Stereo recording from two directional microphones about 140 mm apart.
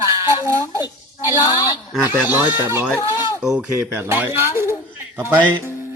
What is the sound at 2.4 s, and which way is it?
Speech, 20° right (ahead or behind).